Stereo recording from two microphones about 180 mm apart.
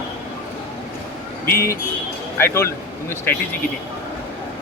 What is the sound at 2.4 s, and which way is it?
Speech, 15° left (ahead or behind).